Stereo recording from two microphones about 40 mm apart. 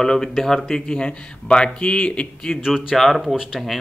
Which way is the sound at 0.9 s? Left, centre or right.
Left.